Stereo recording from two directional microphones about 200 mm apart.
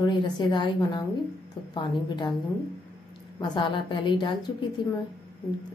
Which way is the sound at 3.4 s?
20° left (ahead or behind).